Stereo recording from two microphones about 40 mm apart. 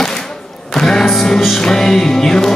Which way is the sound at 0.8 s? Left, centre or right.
Centre.